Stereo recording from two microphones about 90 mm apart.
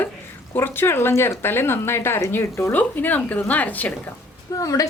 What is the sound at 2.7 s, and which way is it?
A woman's voice, 20° left (ahead or behind).